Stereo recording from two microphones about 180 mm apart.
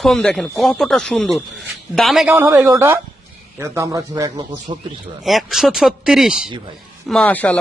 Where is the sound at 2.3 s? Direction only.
10° right (ahead or behind).